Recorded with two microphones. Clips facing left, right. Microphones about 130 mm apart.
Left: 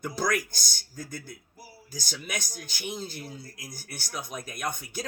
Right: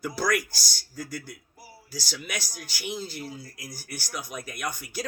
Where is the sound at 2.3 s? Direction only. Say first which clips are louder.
Left 3 dB; 20° left (ahead or behind).